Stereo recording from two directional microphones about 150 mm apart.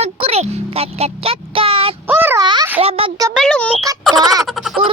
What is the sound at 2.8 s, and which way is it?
Speech, 40° right (ahead or behind).